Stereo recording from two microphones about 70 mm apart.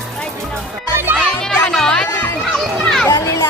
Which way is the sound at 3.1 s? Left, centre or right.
Left.